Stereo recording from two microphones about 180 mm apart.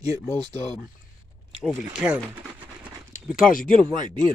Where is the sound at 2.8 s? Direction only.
5° right (ahead or behind).